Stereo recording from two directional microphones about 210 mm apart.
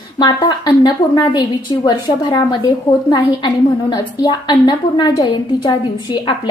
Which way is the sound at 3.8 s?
20° left (ahead or behind).